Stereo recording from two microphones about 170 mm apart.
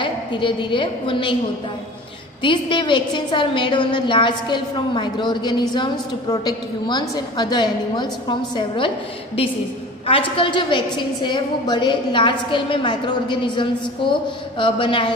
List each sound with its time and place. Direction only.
0.0 s a woman's voice: 30° left (ahead or behind)
2.4 s a woman's voice: 30° left (ahead or behind)
10.0 s a woman's voice: 30° left (ahead or behind)